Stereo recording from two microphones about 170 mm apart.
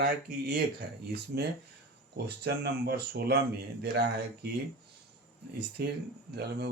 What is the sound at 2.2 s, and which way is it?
Speech, 70° right (ahead or behind).